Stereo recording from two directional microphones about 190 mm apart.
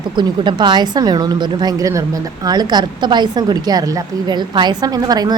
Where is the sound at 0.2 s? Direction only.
25° right (ahead or behind).